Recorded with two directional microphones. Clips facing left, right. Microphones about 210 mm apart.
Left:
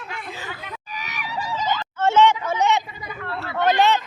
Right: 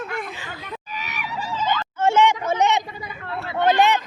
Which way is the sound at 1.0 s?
45° left (ahead or behind).